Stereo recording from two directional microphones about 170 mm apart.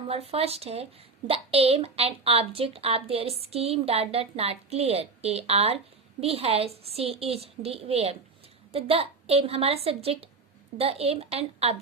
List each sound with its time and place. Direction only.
0.1 s a woman's voice: 35° right (ahead or behind)